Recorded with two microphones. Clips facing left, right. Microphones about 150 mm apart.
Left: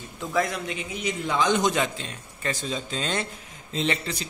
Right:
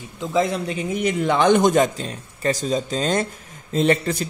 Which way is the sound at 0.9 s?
60° right (ahead or behind).